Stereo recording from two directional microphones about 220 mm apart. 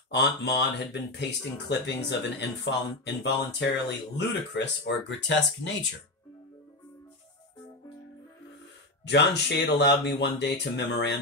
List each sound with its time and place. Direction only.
0.1 s speech: 50° left (ahead or behind)
9.0 s speech: 50° left (ahead or behind)